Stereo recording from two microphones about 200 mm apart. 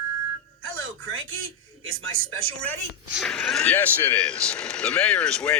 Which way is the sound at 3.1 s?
Centre (ahead or behind).